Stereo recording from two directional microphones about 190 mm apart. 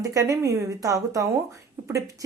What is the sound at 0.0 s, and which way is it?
A woman's voice, 20° right (ahead or behind).